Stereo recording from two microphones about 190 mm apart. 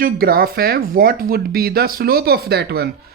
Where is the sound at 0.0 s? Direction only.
50° right (ahead or behind).